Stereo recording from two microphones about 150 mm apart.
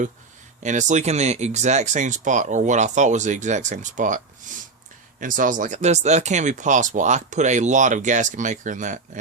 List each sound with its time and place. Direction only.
0.6 s speech: 55° right (ahead or behind)